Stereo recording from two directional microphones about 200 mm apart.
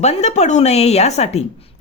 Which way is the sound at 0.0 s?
35° left (ahead or behind).